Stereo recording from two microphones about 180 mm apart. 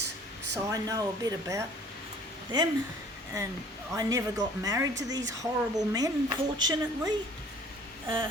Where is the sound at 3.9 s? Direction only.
20° right (ahead or behind).